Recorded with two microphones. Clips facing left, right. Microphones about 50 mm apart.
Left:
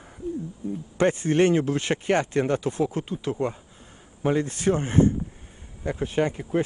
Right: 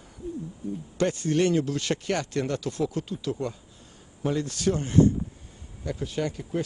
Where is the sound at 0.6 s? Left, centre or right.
Left.